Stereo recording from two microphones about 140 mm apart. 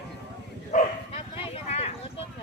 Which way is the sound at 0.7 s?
60° left (ahead or behind).